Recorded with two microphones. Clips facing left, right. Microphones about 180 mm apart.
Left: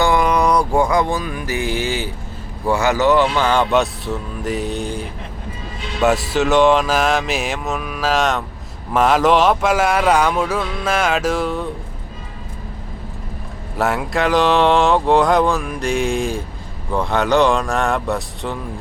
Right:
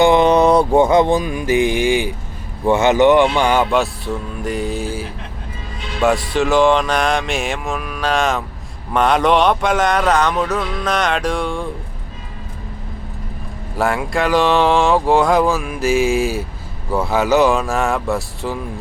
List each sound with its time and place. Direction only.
0.0 s music: 25° right (ahead or behind)
2.6 s speech: 20° right (ahead or behind)
3.7 s speech: centre (ahead or behind)
13.7 s speech: centre (ahead or behind)